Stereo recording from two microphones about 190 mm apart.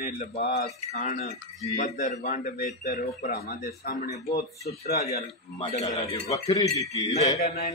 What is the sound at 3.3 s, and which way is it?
Speech, 55° left (ahead or behind).